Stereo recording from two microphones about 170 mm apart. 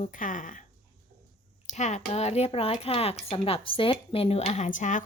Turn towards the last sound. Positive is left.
turn(degrees=50)  # may be behind; listen again after turning